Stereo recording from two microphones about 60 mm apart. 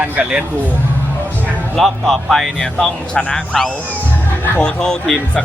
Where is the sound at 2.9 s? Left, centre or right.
Centre.